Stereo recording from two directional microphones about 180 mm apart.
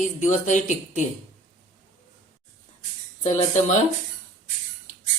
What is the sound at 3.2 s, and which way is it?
Speech, 40° left (ahead or behind).